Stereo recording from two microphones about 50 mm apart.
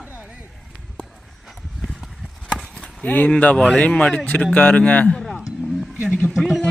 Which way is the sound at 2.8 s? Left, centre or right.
Left.